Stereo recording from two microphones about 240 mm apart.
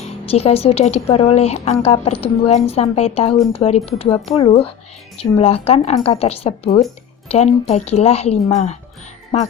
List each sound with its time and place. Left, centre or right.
0.0 s speech: left